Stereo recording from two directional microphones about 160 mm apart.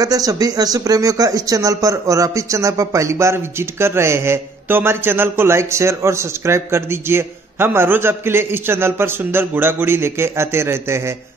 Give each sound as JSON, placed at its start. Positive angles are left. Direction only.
{"t": 0.0, "sound": "speech", "side_deg": -25}